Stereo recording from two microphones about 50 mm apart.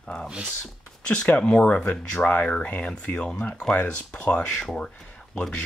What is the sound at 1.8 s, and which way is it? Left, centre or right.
Speech, left.